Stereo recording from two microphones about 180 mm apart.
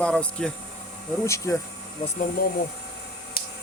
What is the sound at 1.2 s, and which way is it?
Speech, 15° left (ahead or behind).